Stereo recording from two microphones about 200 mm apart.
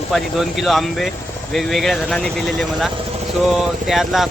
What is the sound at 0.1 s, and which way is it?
Speech, centre (ahead or behind).